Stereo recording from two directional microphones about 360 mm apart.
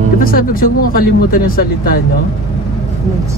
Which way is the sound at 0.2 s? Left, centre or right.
Left.